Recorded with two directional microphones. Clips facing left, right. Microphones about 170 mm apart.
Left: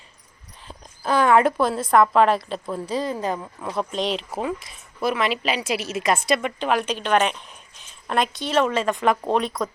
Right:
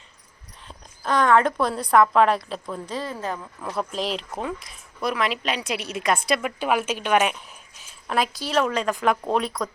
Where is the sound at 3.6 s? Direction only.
Centre (ahead or behind).